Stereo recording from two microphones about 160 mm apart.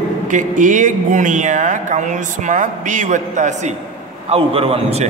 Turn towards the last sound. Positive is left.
turn(degrees=-40)  # may be behind; listen again after turning